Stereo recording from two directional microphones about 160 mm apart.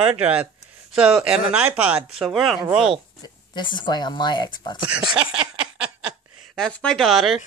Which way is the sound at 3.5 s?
30° left (ahead or behind).